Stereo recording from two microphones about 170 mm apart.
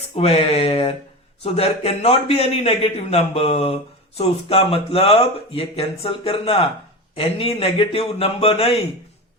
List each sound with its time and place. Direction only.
0.2 s speech: 35° left (ahead or behind)